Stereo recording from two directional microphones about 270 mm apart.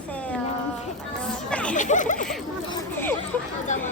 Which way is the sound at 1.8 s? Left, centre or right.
Left.